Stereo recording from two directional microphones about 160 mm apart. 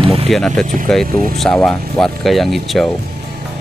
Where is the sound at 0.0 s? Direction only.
35° right (ahead or behind).